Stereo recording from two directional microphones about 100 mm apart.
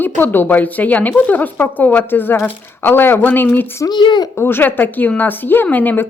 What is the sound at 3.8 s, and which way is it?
Speech, 50° left (ahead or behind).